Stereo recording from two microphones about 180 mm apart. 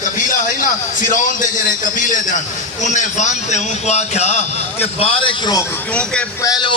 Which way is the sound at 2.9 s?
40° left (ahead or behind).